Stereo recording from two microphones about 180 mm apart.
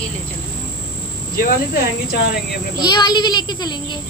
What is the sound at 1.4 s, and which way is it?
Speech, 50° left (ahead or behind).